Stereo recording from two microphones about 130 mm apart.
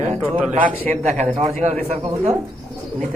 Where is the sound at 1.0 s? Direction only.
60° right (ahead or behind).